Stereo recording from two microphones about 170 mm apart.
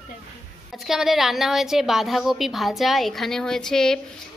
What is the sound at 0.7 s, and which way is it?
A woman's voice, centre (ahead or behind).